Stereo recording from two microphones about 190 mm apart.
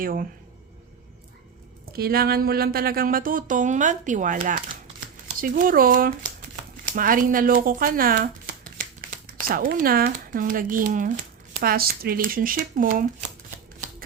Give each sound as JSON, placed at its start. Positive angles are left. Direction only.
{"t": 0.0, "sound": "speech", "side_deg": -50}
{"t": 2.0, "sound": "speech", "side_deg": -55}